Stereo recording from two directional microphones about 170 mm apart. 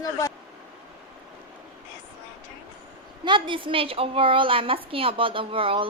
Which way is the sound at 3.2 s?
30° right (ahead or behind).